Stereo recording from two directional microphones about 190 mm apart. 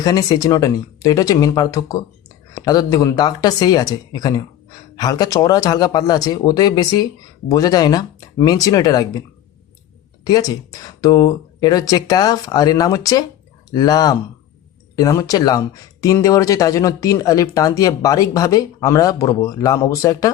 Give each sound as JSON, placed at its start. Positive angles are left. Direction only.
{"t": 0.0, "sound": "speech", "side_deg": 20}
{"t": 10.2, "sound": "speech", "side_deg": 20}